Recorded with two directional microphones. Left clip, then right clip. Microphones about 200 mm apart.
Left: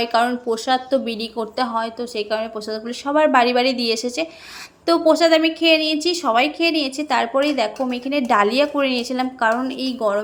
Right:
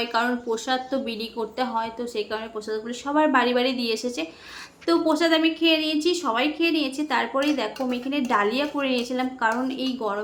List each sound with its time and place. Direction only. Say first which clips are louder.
0.0 s a woman's voice: left 6 dB; 20° left (ahead or behind)